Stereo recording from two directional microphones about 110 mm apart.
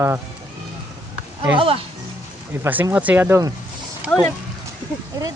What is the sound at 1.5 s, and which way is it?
Speech, 55° right (ahead or behind).